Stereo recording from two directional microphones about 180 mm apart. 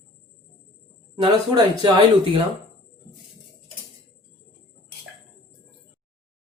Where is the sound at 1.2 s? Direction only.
25° right (ahead or behind).